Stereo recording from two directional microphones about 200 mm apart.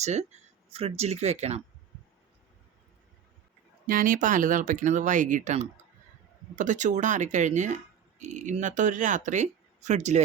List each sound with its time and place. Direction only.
0.0 s speech: 35° right (ahead or behind)
3.8 s speech: 45° right (ahead or behind)